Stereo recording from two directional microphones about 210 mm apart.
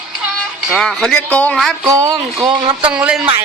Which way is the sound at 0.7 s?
Centre (ahead or behind).